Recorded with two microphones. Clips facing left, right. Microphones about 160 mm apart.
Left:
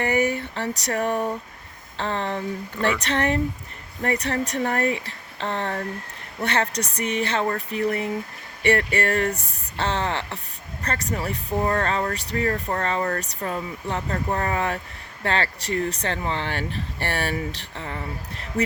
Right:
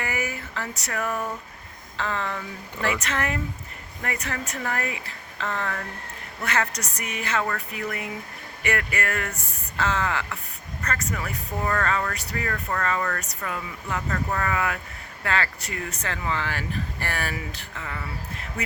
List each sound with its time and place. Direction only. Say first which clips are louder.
0.0 s speech: left 8 dB; 35° left (ahead or behind)